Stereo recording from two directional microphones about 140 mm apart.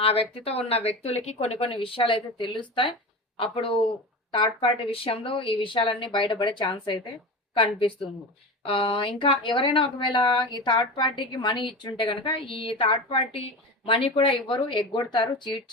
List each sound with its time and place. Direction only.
0.0 s a woman's voice: 45° left (ahead or behind)